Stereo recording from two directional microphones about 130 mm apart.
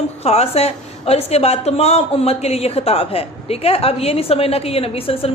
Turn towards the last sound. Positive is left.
turn(degrees=50)  # may be behind; listen again after turning